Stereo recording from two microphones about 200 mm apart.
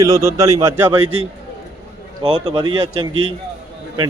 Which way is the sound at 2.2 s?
25° right (ahead or behind).